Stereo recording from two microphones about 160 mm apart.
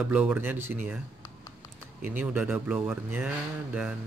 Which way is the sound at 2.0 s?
10° right (ahead or behind).